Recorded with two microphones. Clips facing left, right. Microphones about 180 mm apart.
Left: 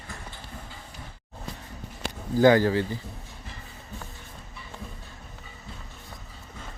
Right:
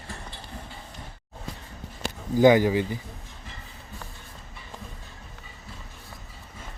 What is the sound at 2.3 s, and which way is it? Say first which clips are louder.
Speech: right 1 dB; 15° right (ahead or behind).